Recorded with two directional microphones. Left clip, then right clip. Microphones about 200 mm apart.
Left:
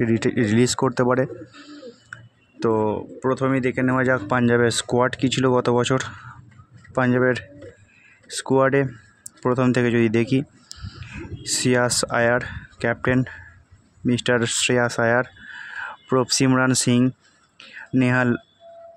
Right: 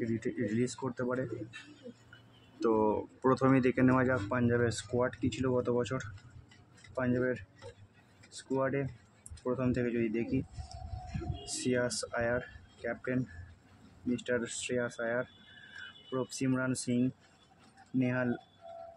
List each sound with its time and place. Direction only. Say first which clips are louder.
0.0 s speech: left 14 dB; 40° left (ahead or behind)
2.6 s speech: left 8 dB; 25° left (ahead or behind); by 7.3 s 50° left (ahead or behind)
8.4 s speech: left 15 dB; 50° left (ahead or behind)